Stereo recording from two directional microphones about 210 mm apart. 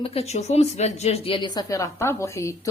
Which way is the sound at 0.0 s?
30° left (ahead or behind).